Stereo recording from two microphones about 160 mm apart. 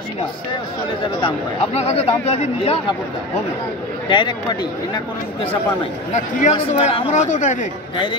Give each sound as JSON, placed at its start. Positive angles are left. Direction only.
{"t": 1.2, "sound": "speech", "side_deg": 40}
{"t": 4.1, "sound": "speech", "side_deg": 30}
{"t": 6.1, "sound": "speech", "side_deg": 45}